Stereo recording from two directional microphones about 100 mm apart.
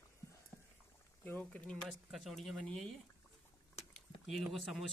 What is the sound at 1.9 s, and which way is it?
Speech, centre (ahead or behind).